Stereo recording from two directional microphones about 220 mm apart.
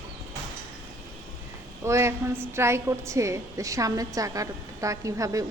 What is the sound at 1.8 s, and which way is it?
A woman's voice, 10° right (ahead or behind).